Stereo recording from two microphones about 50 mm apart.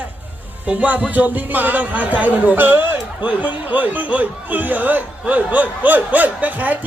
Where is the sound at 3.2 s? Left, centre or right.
Right.